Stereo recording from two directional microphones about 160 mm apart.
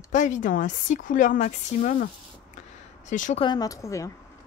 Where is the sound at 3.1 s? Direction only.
50° left (ahead or behind).